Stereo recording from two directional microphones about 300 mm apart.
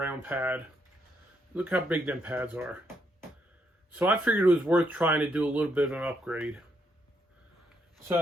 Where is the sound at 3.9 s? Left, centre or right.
Centre.